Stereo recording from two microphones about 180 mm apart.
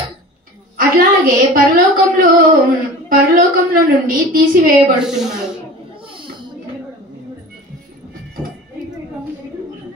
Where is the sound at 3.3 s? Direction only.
50° right (ahead or behind).